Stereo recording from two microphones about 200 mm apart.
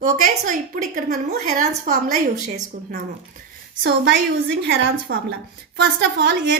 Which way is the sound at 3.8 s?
60° right (ahead or behind).